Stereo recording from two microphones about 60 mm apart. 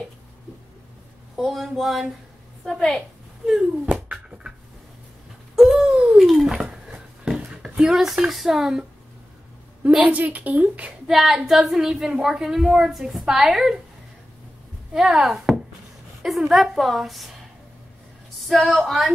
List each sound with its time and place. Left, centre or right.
1.3 s a woman's voice: centre
2.6 s a woman's voice: centre
3.4 s a woman's voice: centre
3.9 s a sound: centre
5.6 s a sound: centre
6.1 s dog: centre
8.3 s speech: centre
9.8 s a woman's voice: right
11.1 s a woman's voice: centre
15.0 s a woman's voice: centre
18.5 s a woman's voice: centre